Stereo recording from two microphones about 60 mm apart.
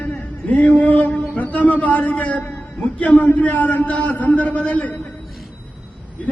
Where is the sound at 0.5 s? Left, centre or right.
Left.